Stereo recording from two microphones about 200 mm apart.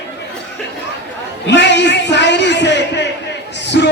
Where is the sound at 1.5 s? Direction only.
60° left (ahead or behind).